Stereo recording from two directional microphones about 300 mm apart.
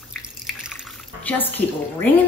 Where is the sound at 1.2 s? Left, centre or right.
Centre.